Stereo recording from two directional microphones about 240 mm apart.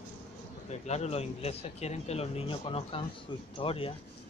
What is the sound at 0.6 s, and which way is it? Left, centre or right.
Speech, left.